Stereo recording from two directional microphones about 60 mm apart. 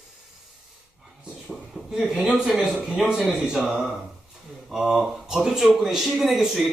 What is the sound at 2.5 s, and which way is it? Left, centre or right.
Speech, centre.